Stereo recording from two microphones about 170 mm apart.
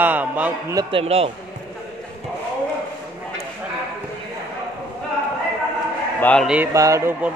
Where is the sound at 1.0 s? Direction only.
35° right (ahead or behind).